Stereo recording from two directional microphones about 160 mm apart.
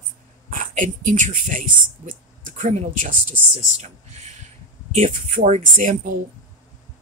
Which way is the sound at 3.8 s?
45° right (ahead or behind).